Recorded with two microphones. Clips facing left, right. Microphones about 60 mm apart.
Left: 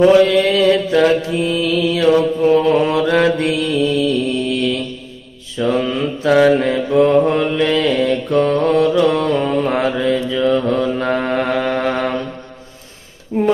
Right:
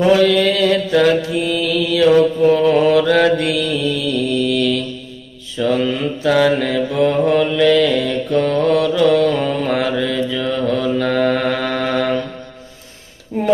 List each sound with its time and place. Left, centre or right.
0.3 s mantra: left